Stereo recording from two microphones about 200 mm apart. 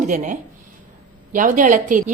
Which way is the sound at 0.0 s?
40° right (ahead or behind).